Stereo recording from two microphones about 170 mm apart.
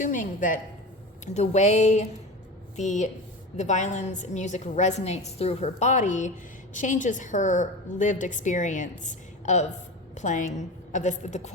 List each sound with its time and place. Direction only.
0.0 s a woman's voice: 50° left (ahead or behind)